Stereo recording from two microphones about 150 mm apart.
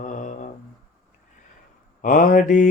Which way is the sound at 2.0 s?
65° left (ahead or behind).